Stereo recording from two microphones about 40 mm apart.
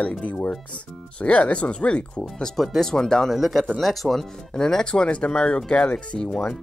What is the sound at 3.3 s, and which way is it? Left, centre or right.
Speech, centre.